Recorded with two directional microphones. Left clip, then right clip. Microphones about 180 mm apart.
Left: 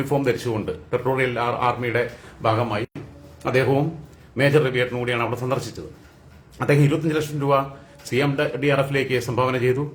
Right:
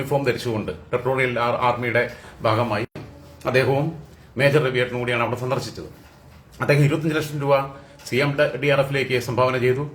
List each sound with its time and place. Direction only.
0.0 s speech: 20° left (ahead or behind)